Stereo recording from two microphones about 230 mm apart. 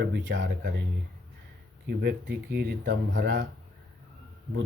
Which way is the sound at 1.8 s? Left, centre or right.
Right.